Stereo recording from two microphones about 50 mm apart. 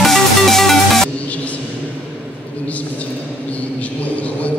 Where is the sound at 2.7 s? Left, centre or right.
Left.